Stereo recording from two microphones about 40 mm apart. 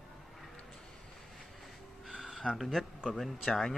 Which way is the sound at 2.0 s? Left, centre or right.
Centre.